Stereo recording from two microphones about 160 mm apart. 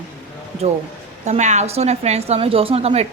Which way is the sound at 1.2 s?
45° right (ahead or behind).